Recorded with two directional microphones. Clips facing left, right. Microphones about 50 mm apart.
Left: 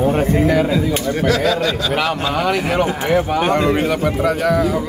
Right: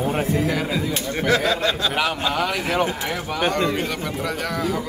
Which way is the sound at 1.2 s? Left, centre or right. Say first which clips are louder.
Left 2 dB; right.